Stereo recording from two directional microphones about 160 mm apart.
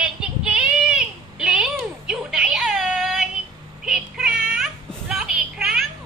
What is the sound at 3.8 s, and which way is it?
Child singing, 5° right (ahead or behind).